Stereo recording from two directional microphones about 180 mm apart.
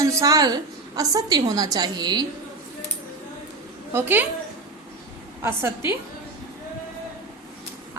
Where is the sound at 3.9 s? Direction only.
10° right (ahead or behind).